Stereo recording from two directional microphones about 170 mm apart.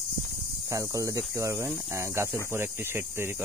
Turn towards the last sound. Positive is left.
turn(degrees=-15)  # may be behind; listen again after turning